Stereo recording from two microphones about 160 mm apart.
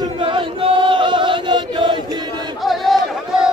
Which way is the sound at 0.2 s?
30° right (ahead or behind).